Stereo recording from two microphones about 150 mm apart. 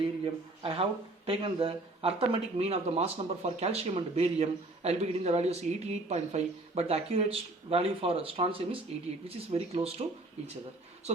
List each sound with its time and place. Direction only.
0.6 s speech: 40° right (ahead or behind)